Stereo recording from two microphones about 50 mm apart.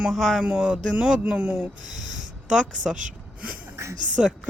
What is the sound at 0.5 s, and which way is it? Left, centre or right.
Speech, centre.